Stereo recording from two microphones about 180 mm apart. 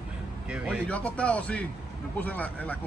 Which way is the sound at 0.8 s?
5° left (ahead or behind).